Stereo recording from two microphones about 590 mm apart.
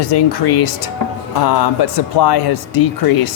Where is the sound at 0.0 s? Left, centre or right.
Left.